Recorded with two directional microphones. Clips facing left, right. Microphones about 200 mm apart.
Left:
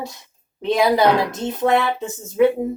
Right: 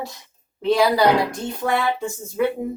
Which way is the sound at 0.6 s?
20° left (ahead or behind).